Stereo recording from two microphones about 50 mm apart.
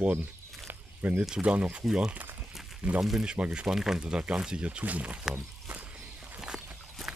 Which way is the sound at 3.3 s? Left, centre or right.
Right.